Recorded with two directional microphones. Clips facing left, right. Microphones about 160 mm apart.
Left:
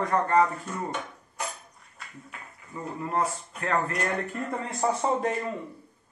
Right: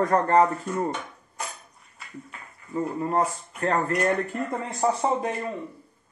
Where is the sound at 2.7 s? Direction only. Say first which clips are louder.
Right 5 dB; 35° right (ahead or behind).